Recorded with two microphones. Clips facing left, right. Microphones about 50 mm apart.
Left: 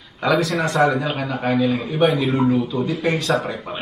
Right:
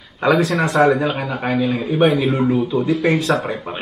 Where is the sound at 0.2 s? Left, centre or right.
Right.